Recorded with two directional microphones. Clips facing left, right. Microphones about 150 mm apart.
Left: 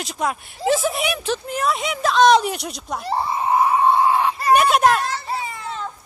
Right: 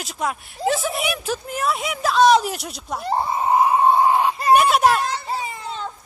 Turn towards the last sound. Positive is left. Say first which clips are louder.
# even
turn(degrees=-5)  # may be behind; listen again after turning